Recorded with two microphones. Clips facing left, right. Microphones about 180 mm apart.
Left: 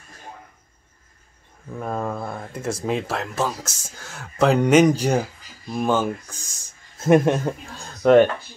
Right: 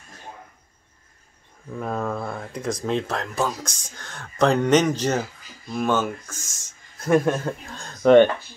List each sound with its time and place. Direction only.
1.8 s speech: 10° left (ahead or behind)
7.7 s speech: 5° left (ahead or behind)